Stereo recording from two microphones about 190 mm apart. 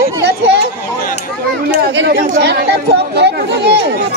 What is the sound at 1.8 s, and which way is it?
Chatter, 60° right (ahead or behind).